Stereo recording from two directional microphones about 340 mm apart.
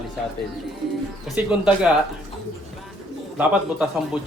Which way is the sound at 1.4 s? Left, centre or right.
Centre.